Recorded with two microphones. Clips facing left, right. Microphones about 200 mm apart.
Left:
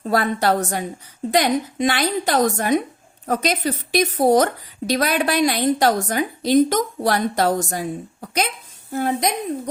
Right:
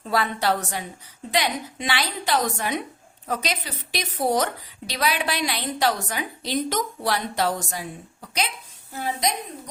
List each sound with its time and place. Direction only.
0.0 s a woman's voice: 45° left (ahead or behind)